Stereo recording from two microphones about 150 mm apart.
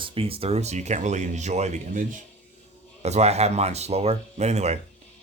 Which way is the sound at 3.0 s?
45° right (ahead or behind).